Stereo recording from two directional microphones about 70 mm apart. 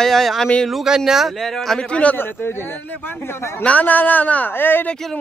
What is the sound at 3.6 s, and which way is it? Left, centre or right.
Speech, left.